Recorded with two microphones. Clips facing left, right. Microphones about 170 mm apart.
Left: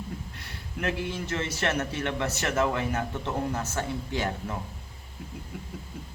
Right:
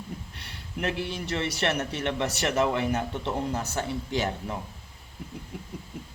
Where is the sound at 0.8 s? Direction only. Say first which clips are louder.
Even; 15° right (ahead or behind).